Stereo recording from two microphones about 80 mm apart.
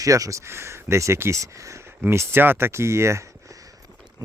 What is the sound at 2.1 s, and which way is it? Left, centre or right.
Speech, right.